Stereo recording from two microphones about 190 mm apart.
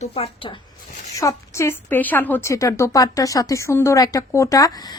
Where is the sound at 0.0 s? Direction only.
30° left (ahead or behind).